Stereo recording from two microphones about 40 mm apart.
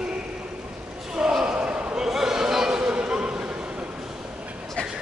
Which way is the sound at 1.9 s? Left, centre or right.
Centre.